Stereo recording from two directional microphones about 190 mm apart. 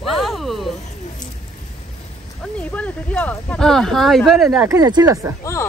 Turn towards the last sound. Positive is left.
turn(degrees=15)  # may be behind; listen again after turning